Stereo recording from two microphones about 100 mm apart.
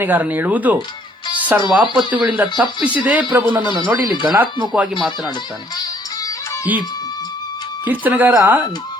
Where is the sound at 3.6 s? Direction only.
50° left (ahead or behind).